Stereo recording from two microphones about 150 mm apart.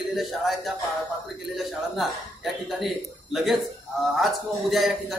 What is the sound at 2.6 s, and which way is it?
Speech, centre (ahead or behind).